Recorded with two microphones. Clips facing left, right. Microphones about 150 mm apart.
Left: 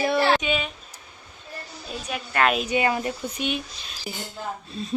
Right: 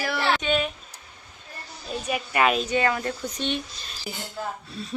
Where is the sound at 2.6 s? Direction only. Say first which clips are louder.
Left 1 dB; 15° left (ahead or behind).